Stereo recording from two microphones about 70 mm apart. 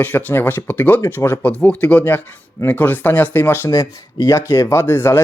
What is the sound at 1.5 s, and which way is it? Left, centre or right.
Speech, centre.